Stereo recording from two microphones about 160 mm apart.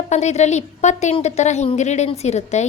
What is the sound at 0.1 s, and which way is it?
A woman's voice, 45° left (ahead or behind).